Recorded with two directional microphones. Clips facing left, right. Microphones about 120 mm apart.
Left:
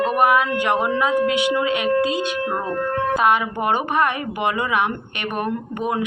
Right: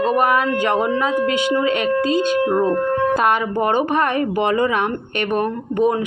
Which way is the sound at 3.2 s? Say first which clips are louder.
Right 1 dB; 45° right (ahead or behind).